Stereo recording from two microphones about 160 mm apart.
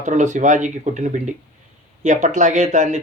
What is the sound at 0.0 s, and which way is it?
Speech, 50° right (ahead or behind).